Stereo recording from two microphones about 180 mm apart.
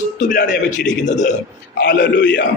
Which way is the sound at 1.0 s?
40° left (ahead or behind).